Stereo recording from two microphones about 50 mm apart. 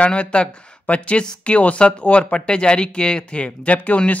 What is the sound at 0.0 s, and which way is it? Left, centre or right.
Speech, left.